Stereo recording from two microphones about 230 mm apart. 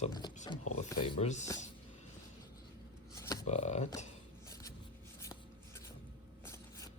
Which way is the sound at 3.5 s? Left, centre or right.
Left.